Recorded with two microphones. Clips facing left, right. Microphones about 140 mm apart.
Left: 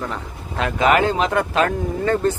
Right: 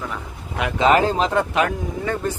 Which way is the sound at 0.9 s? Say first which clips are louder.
Right 1 dB; 35° right (ahead or behind).